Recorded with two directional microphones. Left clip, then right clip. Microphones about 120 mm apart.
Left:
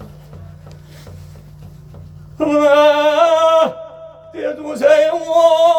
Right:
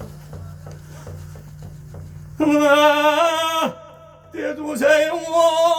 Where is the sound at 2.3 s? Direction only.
30° left (ahead or behind).